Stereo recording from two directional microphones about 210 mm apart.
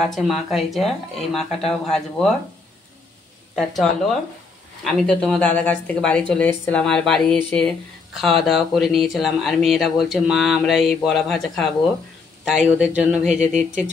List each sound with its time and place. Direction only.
0.0 s speech: centre (ahead or behind)
3.5 s speech: centre (ahead or behind)
13.5 s speech: 35° right (ahead or behind)